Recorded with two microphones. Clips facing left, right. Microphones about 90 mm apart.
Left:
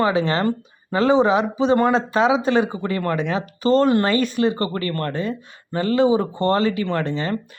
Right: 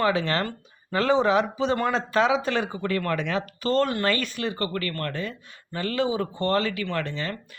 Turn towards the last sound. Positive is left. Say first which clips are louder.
# left 6 dB
turn(degrees=25)  # may be behind; listen again after turning